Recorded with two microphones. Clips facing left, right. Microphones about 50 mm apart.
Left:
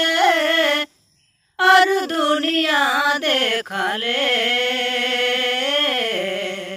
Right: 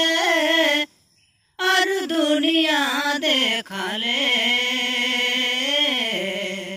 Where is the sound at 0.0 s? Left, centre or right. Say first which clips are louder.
Left 3 dB; centre.